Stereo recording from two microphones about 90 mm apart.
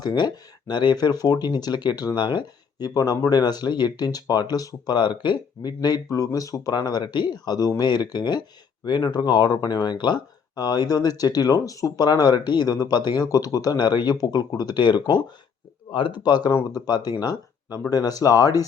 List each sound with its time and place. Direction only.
0.0 s speech: 50° left (ahead or behind)
4.9 s speech: 60° left (ahead or behind); by 6.7 s 40° left (ahead or behind)
6.7 s speech: 50° left (ahead or behind)
15.9 s speech: 65° left (ahead or behind); by 18.6 s 40° left (ahead or behind)